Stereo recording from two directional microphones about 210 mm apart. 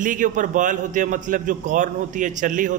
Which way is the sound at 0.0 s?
40° right (ahead or behind).